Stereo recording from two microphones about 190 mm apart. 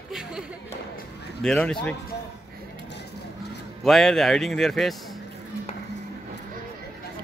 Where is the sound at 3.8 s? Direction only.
Centre (ahead or behind).